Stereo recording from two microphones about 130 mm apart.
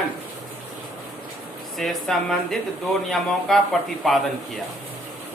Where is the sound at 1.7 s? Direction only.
Centre (ahead or behind).